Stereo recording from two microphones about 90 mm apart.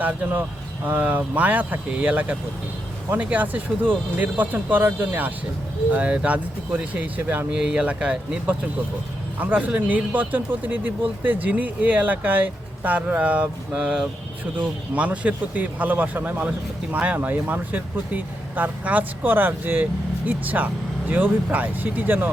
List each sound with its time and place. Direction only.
0.0 s speech: 20° right (ahead or behind)
5.9 s speech: 15° right (ahead or behind)
7.5 s speech: 10° right (ahead or behind)